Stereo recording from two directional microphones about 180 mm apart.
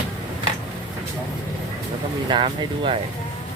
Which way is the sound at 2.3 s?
30° right (ahead or behind).